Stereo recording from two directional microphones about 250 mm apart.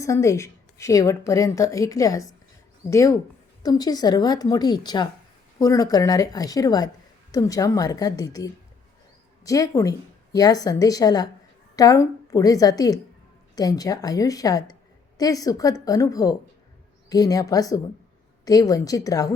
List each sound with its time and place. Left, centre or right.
0.0 s a woman's voice: centre